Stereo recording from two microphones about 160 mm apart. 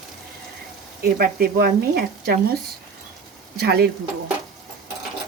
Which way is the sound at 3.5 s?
85° right.